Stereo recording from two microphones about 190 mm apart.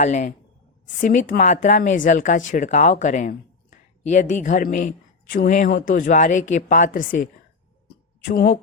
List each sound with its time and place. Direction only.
0.0 s speech: 40° left (ahead or behind)
8.3 s a woman's voice: 60° left (ahead or behind)